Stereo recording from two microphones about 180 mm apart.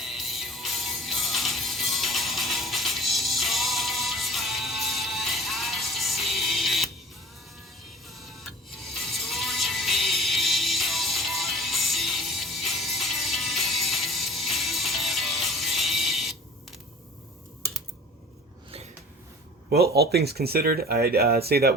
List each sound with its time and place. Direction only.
0.0 s music: centre (ahead or behind)
8.0 s music: centre (ahead or behind)
19.7 s speech: 60° right (ahead or behind)